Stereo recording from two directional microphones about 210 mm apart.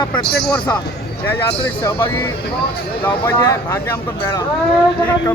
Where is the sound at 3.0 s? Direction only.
20° left (ahead or behind).